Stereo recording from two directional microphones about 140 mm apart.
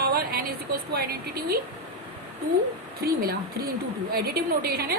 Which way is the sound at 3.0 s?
90° right.